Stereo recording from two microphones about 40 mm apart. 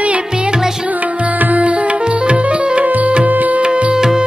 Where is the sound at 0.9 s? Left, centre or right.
Right.